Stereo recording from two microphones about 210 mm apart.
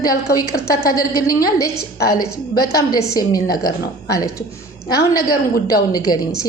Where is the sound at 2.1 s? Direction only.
90° left.